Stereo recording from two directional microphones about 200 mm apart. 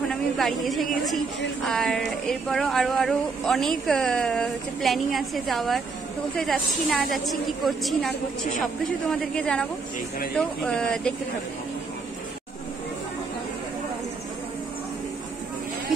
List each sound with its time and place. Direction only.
0.1 s a woman's voice: centre (ahead or behind)
8.1 s a woman's voice: 40° left (ahead or behind)
9.1 s speech: 5° left (ahead or behind)